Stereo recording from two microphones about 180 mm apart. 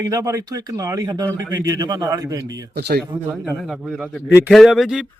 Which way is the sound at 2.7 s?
65° right (ahead or behind).